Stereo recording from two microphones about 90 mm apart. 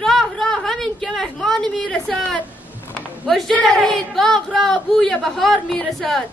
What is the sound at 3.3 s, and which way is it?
Speech, 5° left (ahead or behind).